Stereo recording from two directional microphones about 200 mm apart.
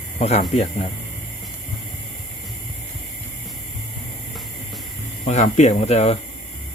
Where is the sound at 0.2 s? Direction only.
35° left (ahead or behind).